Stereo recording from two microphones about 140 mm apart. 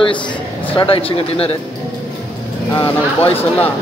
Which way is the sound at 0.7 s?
40° left (ahead or behind).